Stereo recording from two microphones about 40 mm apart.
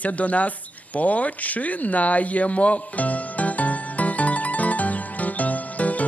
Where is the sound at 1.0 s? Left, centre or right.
Left.